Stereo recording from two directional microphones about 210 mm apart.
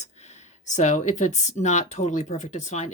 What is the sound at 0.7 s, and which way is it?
Speech, 35° left (ahead or behind).